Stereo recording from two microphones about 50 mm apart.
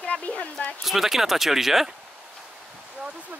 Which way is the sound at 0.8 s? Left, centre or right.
Centre.